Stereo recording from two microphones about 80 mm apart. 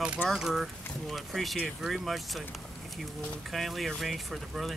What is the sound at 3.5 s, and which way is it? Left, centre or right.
Speech, centre.